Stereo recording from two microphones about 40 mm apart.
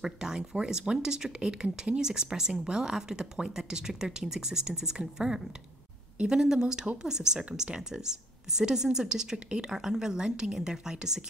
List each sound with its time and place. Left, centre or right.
0.0 s a woman's voice: centre